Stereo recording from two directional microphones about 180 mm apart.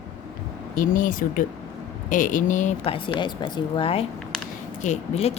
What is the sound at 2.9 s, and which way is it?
A woman's voice, 30° left (ahead or behind).